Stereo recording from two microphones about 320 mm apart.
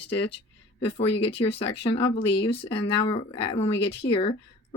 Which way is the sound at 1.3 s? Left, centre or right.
Centre.